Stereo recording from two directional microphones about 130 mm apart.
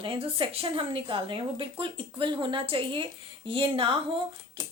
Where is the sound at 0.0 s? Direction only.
40° right (ahead or behind).